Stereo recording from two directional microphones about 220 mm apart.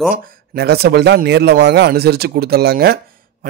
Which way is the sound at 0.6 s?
45° right (ahead or behind).